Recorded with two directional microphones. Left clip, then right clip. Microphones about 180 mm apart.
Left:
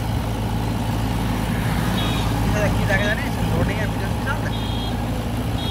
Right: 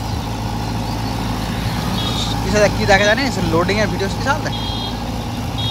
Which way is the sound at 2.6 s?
20° right (ahead or behind).